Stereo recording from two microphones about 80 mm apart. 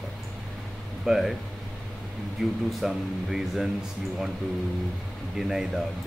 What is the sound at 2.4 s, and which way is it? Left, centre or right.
Speech, centre.